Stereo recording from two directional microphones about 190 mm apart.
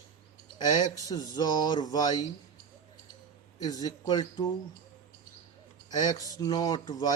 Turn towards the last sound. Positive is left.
turn(degrees=20)  # may be behind; listen again after turning